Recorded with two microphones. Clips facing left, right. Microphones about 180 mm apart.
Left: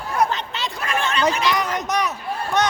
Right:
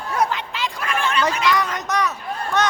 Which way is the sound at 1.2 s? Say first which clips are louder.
Even; 20° left (ahead or behind).